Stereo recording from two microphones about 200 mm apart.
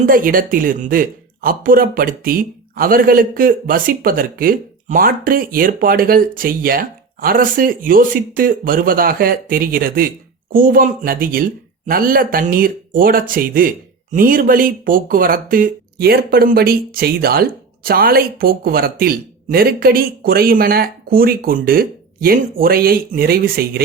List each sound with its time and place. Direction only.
0.1 s speech: 45° right (ahead or behind)